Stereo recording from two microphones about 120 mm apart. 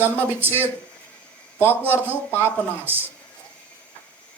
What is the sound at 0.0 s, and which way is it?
Speech, 15° right (ahead or behind).